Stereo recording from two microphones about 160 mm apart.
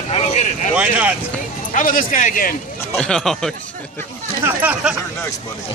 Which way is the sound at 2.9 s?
5° left (ahead or behind).